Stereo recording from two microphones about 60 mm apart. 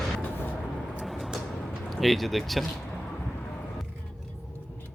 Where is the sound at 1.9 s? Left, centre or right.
Centre.